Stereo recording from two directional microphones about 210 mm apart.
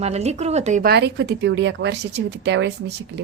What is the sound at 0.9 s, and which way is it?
A woman's voice, 50° right (ahead or behind).